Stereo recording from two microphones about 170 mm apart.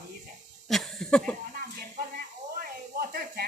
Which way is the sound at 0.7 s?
Centre (ahead or behind).